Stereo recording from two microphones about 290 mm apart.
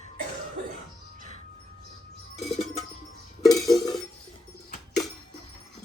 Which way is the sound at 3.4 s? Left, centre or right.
Centre.